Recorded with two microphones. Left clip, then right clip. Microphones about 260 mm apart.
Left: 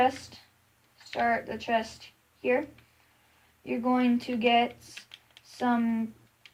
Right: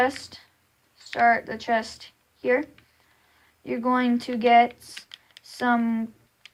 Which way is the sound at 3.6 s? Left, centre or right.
Right.